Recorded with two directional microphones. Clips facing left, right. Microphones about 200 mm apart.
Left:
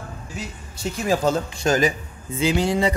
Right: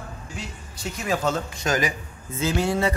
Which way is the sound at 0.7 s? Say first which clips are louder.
Left 4 dB; 35° left (ahead or behind).